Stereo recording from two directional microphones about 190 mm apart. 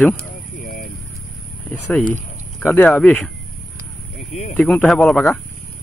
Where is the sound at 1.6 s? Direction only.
10° left (ahead or behind).